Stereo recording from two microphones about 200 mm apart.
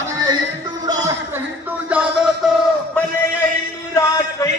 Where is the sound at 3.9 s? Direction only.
15° left (ahead or behind).